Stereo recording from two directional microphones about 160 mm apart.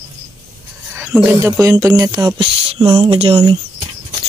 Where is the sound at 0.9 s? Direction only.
10° right (ahead or behind); by 2.9 s 35° right (ahead or behind).